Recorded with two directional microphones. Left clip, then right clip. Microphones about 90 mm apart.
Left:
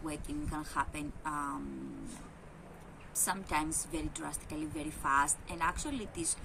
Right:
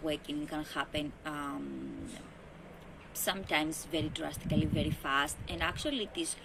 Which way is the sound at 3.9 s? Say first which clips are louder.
Right 4 dB; 45° left (ahead or behind).